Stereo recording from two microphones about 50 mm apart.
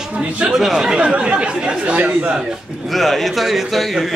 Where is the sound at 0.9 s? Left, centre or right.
Right.